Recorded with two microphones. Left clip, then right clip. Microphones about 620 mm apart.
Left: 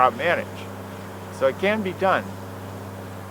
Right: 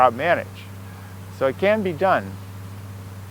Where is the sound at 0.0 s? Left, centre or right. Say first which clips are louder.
Right 2 dB; right.